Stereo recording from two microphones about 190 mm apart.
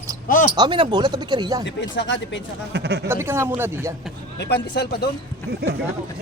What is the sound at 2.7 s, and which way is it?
Speech, 60° right (ahead or behind).